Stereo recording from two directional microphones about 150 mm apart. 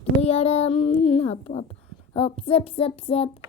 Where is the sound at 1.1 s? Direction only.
45° left (ahead or behind).